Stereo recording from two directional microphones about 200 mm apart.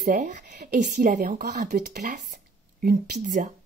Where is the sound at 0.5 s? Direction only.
50° right (ahead or behind).